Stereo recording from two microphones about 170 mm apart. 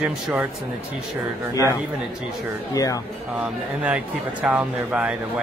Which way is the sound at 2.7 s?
20° left (ahead or behind).